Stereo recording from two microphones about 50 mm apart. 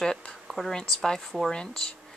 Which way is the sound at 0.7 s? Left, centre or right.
Centre.